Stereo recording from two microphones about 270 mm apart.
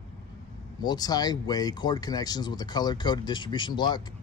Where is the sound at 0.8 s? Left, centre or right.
Centre.